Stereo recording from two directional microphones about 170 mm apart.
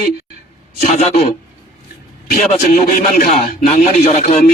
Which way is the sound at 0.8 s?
40° left (ahead or behind).